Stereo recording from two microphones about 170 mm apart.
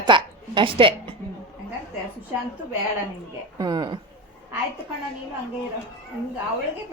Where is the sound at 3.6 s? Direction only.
25° right (ahead or behind).